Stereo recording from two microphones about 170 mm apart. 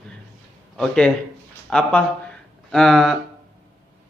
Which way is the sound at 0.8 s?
5° left (ahead or behind).